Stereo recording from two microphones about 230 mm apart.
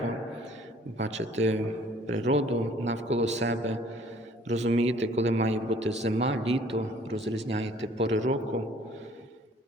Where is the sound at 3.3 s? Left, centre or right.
Right.